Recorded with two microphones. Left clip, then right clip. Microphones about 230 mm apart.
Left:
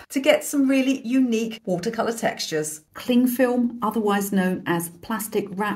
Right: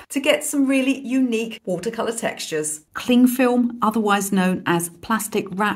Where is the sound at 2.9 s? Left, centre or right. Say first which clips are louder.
Right 3 dB; right.